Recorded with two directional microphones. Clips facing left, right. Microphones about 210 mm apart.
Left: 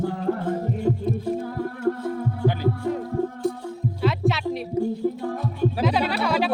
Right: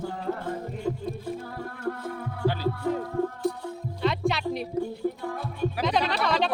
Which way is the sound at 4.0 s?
5° left (ahead or behind).